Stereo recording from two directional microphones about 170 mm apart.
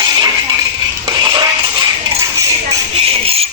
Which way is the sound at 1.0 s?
25° right (ahead or behind).